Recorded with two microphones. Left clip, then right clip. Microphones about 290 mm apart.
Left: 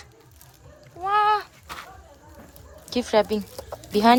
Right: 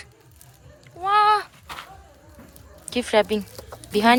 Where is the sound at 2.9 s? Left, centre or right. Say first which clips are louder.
Right 1 dB; centre.